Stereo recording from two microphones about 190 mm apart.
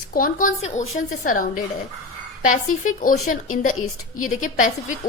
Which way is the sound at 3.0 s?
45° left (ahead or behind).